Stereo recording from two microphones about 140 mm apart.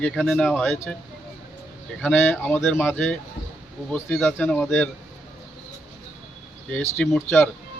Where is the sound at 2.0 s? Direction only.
15° left (ahead or behind).